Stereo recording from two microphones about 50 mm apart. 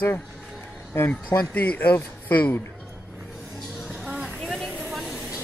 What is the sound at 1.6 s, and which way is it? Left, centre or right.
Speech, left.